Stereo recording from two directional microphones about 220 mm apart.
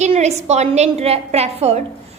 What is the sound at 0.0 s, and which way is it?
A woman's voice, 30° right (ahead or behind).